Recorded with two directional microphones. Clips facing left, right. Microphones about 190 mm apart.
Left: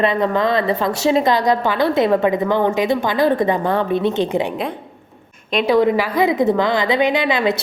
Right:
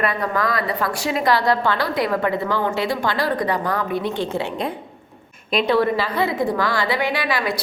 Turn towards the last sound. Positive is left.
turn(degrees=20)  # may be behind; listen again after turning